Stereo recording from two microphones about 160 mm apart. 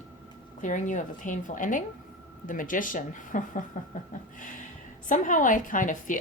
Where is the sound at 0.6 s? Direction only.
50° left (ahead or behind).